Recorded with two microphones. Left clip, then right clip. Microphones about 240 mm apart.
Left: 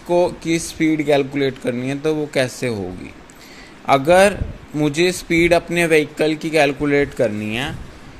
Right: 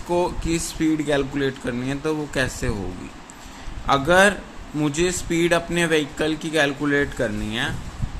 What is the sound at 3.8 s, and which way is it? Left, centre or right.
A man's voice, centre.